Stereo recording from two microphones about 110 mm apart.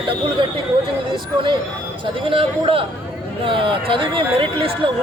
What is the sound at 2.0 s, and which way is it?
A man's voice, 55° right (ahead or behind).